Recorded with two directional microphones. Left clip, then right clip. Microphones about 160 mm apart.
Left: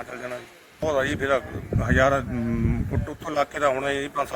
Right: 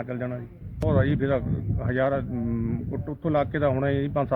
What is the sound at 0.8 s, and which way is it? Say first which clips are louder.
Speech: left 2 dB; 5° left (ahead or behind).